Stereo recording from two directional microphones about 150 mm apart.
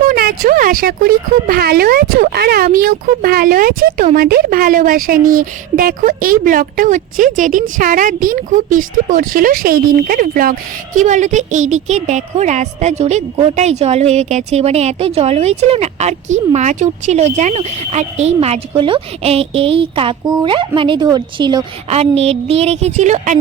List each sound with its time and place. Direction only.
0.0 s speech: 75° right (ahead or behind); by 21.6 s 30° right (ahead or behind)
21.8 s a woman's voice: 45° right (ahead or behind)